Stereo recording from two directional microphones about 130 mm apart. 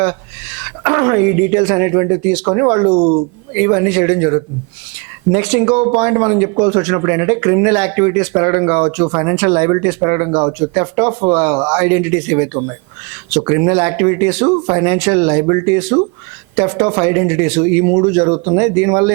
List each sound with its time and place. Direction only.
0.6 s speech: 20° right (ahead or behind)